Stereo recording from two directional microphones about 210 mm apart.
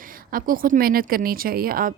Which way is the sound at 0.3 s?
40° right (ahead or behind).